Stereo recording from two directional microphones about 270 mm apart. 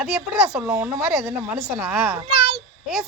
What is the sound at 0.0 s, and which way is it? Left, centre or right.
Speech, centre.